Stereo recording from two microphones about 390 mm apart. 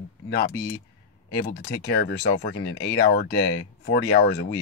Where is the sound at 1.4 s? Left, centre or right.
Left.